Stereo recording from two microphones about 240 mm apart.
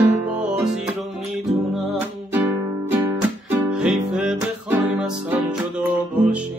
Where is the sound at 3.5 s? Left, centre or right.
Centre.